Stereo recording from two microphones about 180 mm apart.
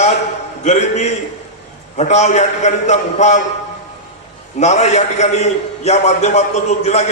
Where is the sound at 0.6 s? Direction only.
40° left (ahead or behind).